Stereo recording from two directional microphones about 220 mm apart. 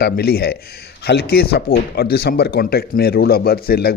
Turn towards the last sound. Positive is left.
turn(degrees=45)  # may be behind; listen again after turning